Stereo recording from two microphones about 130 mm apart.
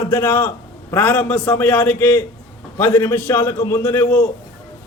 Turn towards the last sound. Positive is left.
turn(degrees=15)  # may be behind; listen again after turning